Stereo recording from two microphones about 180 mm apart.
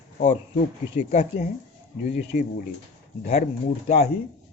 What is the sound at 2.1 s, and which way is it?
Speech, 35° left (ahead or behind).